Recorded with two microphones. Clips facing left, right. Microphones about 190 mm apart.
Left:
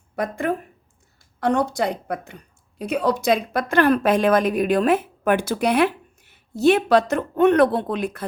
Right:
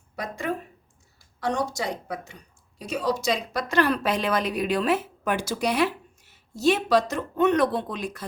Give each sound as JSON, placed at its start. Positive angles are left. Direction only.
{"t": 0.2, "sound": "a woman's voice", "side_deg": 55}